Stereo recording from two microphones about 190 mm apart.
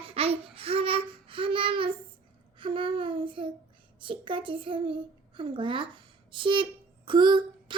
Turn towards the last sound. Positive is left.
turn(degrees=-25)  # may be behind; listen again after turning